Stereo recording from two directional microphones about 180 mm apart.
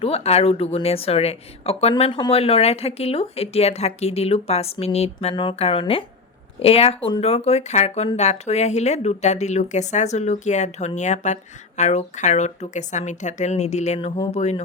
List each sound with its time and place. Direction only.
0.0 s speech: 35° left (ahead or behind)